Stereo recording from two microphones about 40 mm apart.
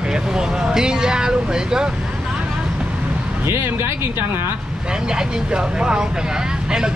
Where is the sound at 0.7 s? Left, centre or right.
Centre.